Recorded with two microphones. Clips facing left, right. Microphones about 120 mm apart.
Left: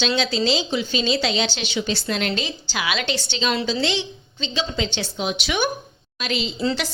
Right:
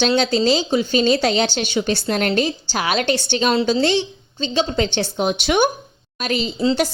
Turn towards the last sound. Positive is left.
turn(degrees=-45)  # may be behind; listen again after turning